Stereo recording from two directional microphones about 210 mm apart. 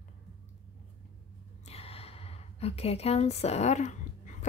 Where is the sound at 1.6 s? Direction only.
30° left (ahead or behind).